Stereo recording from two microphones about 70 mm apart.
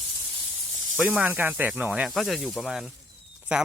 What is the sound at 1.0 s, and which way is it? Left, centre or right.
Speech, centre.